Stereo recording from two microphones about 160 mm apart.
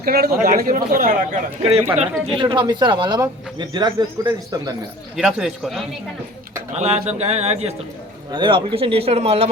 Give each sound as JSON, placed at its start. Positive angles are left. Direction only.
{"t": 0.0, "sound": "speech", "side_deg": -70}
{"t": 1.6, "sound": "speech", "side_deg": -40}
{"t": 2.4, "sound": "speech", "side_deg": -30}
{"t": 5.1, "sound": "a man's voice", "side_deg": -5}
{"t": 6.7, "sound": "speech", "side_deg": -45}
{"t": 8.3, "sound": "speech", "side_deg": -30}